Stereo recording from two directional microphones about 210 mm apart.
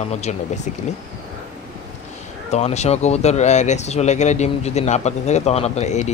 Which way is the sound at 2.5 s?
30° left (ahead or behind).